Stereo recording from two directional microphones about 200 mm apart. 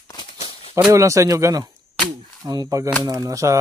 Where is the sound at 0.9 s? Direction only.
15° right (ahead or behind).